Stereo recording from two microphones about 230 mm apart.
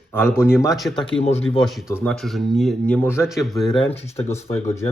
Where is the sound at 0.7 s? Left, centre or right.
Centre.